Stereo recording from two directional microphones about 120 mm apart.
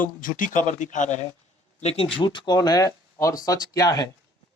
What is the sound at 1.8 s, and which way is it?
Speech, 55° left (ahead or behind).